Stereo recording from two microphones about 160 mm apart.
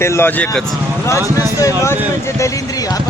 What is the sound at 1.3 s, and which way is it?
Speech, 20° left (ahead or behind).